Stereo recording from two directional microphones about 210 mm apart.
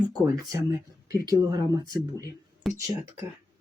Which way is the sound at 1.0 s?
15° right (ahead or behind).